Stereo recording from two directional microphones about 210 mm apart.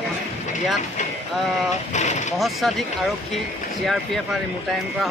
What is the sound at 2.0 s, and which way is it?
Speech, 35° left (ahead or behind).